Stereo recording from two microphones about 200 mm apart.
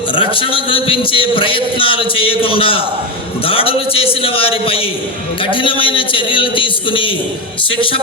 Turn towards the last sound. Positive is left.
turn(degrees=25)  # may be behind; listen again after turning